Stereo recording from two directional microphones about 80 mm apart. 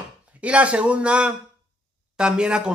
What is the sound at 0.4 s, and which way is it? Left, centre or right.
A man's voice, centre.